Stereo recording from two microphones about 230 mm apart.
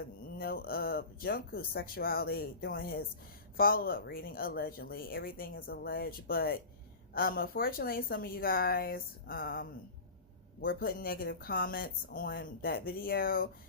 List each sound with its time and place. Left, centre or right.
0.3 s speech: left